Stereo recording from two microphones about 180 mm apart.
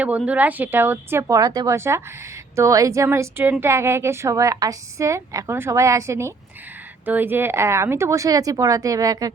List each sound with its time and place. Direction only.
0.2 s a woman's voice: 10° right (ahead or behind)